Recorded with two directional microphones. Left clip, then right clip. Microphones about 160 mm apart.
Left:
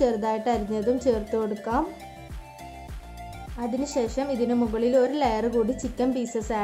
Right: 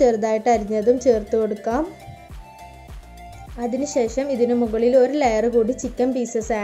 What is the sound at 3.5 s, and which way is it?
A woman's voice, 15° right (ahead or behind).